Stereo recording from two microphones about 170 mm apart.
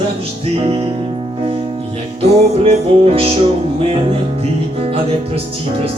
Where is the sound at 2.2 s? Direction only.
35° right (ahead or behind).